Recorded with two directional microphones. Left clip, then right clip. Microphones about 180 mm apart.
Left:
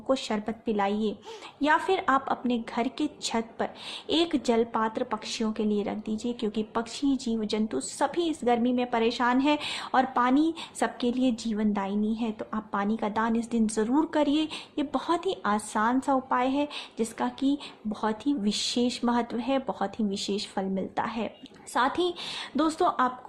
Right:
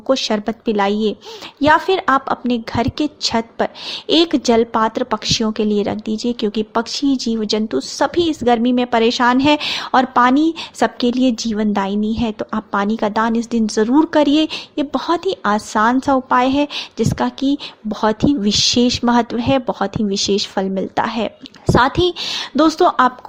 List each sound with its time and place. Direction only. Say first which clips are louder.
0.1 s a woman's voice: right 11 dB; 35° right (ahead or behind)